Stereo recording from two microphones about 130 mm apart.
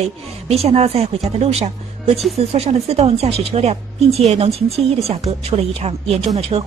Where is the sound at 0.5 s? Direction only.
55° right (ahead or behind).